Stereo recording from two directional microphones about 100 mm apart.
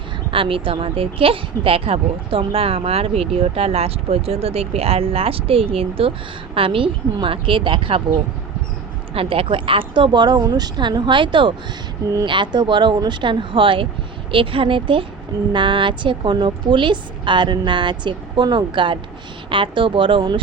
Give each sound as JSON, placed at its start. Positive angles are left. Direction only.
{"t": 0.3, "sound": "speech", "side_deg": -65}
{"t": 9.1, "sound": "a woman's voice", "side_deg": -70}